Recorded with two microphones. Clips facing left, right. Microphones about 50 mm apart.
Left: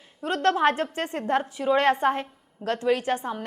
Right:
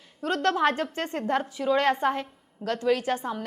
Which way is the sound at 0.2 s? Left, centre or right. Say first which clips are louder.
Left 2 dB; left.